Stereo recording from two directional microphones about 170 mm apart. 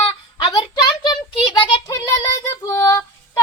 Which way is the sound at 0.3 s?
25° left (ahead or behind).